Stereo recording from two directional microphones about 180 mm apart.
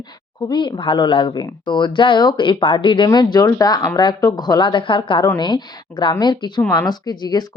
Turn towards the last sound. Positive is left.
turn(degrees=25)  # may be behind; listen again after turning